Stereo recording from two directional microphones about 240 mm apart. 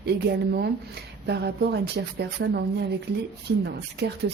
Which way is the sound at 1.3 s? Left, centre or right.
Right.